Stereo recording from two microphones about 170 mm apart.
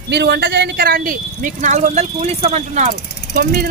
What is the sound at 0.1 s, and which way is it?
Speech, 85° right.